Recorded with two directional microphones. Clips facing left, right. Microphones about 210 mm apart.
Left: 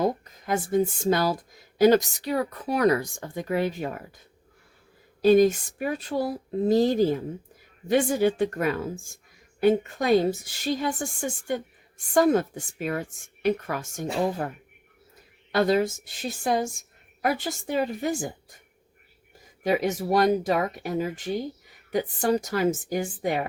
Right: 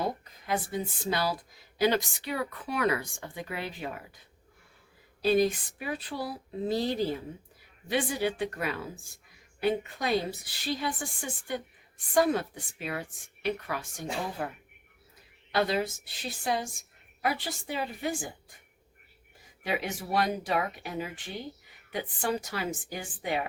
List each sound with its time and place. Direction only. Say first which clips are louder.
0.0 s speech: left 7 dB; 45° left (ahead or behind)
5.2 s a woman's voice: left 7 dB; 45° left (ahead or behind)
15.5 s a woman's voice: left 6 dB; 45° left (ahead or behind)
19.6 s a woman's voice: left 9 dB; 40° left (ahead or behind)